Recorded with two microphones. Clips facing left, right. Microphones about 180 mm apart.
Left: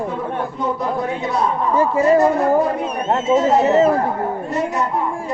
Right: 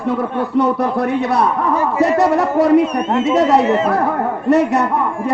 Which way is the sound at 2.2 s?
85° right.